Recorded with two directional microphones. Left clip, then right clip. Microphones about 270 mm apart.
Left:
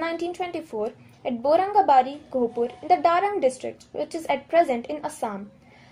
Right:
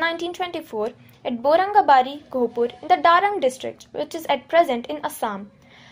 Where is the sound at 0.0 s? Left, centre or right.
Centre.